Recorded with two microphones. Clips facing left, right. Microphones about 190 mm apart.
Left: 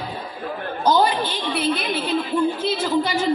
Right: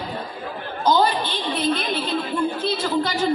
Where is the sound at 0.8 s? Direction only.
10° left (ahead or behind).